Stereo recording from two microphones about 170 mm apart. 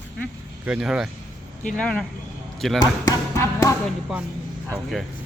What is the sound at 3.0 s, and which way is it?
Music, 20° left (ahead or behind).